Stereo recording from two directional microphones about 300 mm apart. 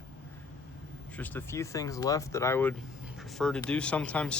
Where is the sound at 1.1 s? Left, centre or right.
Centre.